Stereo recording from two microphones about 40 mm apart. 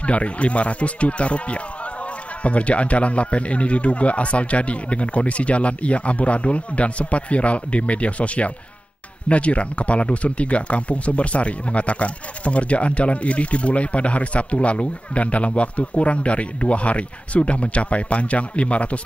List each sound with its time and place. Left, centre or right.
0.0 s speech: left